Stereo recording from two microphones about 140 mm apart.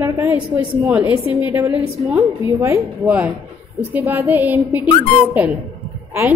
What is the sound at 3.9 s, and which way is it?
Speech, 15° right (ahead or behind).